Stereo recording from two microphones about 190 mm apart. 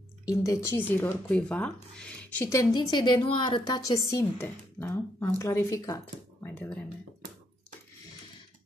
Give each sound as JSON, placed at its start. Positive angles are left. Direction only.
{"t": 0.2, "sound": "speech", "side_deg": 20}